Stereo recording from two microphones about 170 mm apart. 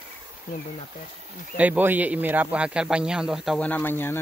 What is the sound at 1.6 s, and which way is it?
A man's voice, 10° right (ahead or behind).